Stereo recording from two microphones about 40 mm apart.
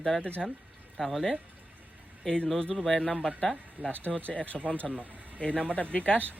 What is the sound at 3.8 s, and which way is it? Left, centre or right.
Speech, right.